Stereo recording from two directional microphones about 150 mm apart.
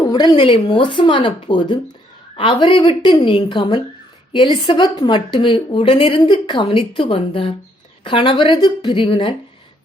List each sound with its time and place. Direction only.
0.0 s a woman's voice: 25° left (ahead or behind)